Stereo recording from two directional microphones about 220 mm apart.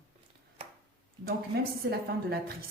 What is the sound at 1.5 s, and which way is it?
Speech, 45° right (ahead or behind).